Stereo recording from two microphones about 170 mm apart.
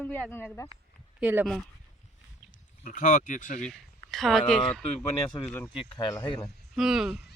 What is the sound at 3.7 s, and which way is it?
Speech, centre (ahead or behind).